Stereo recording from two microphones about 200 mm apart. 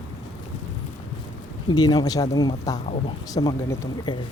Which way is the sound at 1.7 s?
20° left (ahead or behind).